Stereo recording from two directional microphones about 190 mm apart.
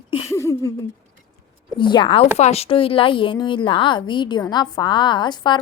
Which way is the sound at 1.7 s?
25° left (ahead or behind).